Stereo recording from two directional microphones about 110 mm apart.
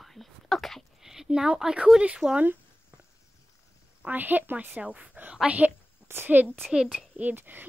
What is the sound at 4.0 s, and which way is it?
A woman's voice, 15° right (ahead or behind).